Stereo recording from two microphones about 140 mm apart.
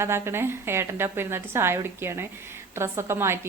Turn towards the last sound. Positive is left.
turn(degrees=-20)  # may be behind; listen again after turning